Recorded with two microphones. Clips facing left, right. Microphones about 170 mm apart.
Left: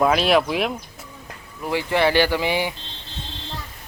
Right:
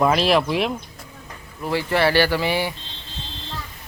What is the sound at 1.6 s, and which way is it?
Speech, 15° left (ahead or behind).